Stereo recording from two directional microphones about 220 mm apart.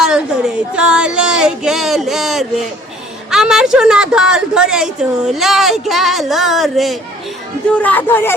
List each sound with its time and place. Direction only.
0.8 s a woman's voice: 5° right (ahead or behind)